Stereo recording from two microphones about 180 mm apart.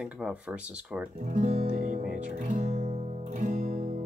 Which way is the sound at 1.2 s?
40° right (ahead or behind).